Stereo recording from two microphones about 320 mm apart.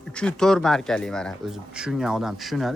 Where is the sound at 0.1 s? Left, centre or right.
Centre.